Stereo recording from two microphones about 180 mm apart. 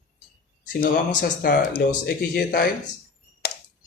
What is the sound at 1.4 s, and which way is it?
Speech, 55° left (ahead or behind).